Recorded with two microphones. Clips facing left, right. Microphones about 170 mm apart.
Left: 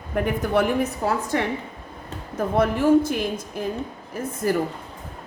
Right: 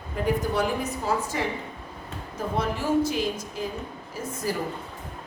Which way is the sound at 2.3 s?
55° left (ahead or behind).